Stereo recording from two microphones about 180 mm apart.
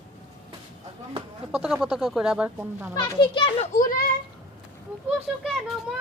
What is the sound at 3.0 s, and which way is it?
Speech, 25° left (ahead or behind).